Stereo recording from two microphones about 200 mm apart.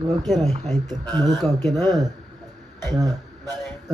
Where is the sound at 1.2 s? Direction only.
20° right (ahead or behind).